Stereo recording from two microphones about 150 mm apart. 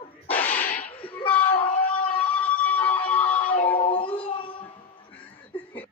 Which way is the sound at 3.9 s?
35° left (ahead or behind).